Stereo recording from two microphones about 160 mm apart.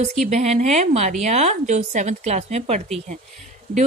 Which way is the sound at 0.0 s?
45° right (ahead or behind).